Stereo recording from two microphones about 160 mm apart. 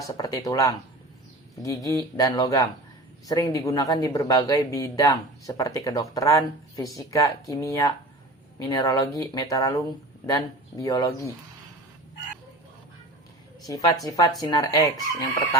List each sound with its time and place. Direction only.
0.0 s speech: 20° left (ahead or behind)
14.0 s speech: 20° left (ahead or behind)